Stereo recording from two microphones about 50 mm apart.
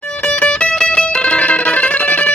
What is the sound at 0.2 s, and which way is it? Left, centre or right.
Music, left.